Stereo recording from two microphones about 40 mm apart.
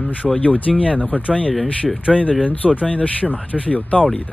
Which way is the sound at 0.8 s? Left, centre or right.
Right.